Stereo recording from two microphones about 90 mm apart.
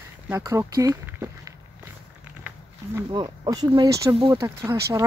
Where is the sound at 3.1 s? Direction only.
50° right (ahead or behind).